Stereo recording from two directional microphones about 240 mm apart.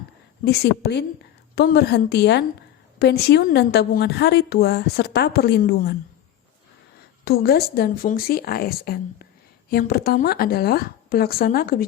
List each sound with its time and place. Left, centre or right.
0.4 s a woman's voice: left
7.3 s a woman's voice: left